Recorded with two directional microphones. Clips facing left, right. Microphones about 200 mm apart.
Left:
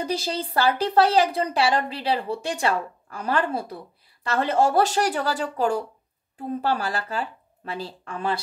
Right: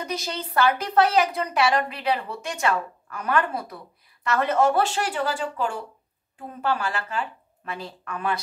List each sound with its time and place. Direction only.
0.0 s a woman's voice: 30° left (ahead or behind)